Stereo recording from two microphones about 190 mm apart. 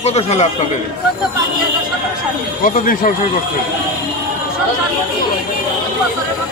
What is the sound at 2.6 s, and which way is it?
Speech, 45° left (ahead or behind).